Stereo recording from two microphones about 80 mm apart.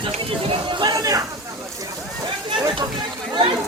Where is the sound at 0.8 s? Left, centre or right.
Right.